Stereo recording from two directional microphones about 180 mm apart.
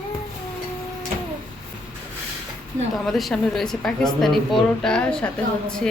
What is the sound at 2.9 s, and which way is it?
A woman's voice, centre (ahead or behind).